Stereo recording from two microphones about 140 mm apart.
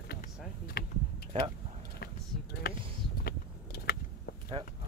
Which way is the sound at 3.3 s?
90° left.